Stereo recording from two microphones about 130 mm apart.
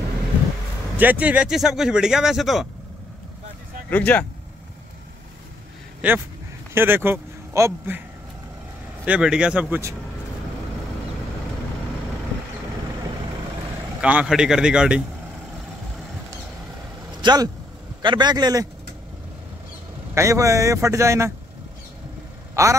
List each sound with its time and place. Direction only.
0.9 s speech: 10° right (ahead or behind)
3.9 s speech: 10° left (ahead or behind)
5.9 s speech: 15° right (ahead or behind)
9.0 s a man's voice: 10° right (ahead or behind)
14.0 s a man's voice: 10° right (ahead or behind)
17.2 s a man's voice: 35° right (ahead or behind)
20.2 s a man's voice: 25° right (ahead or behind)
22.5 s vehicle: 25° right (ahead or behind)